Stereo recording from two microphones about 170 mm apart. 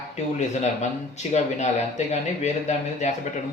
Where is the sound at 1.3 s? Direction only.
40° left (ahead or behind).